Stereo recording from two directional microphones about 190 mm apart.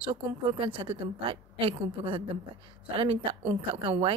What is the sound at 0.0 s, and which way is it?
A woman's voice, 25° right (ahead or behind).